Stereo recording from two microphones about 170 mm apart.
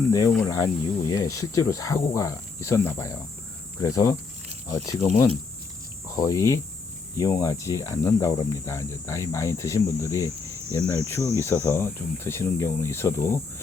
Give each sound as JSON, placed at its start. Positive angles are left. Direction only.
{"t": 0.1, "sound": "speech", "side_deg": 20}
{"t": 6.1, "sound": "speech", "side_deg": 20}